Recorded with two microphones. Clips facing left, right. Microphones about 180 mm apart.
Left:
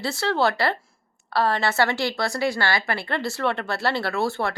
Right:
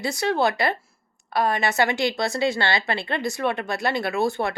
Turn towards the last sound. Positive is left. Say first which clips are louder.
# right 1 dB
turn(degrees=-15)  # may be behind; listen again after turning